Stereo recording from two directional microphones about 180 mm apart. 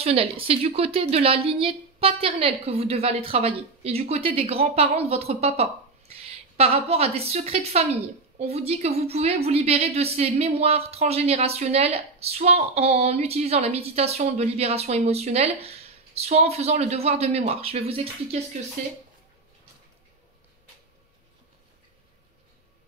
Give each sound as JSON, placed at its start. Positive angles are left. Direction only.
{"t": 0.0, "sound": "a woman's voice", "side_deg": -30}